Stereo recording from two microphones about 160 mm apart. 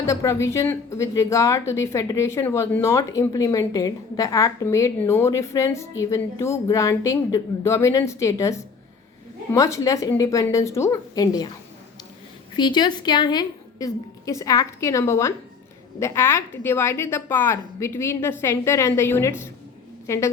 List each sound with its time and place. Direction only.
0.0 s a woman's voice: 20° left (ahead or behind)
12.5 s a woman's voice: 25° left (ahead or behind)